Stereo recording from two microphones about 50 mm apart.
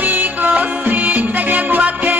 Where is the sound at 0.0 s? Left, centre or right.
Right.